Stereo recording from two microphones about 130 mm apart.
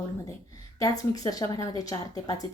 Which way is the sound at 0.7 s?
30° left (ahead or behind).